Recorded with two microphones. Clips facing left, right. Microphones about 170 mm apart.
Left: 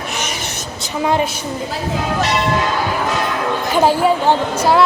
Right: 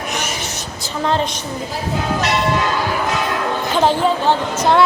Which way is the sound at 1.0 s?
10° left (ahead or behind).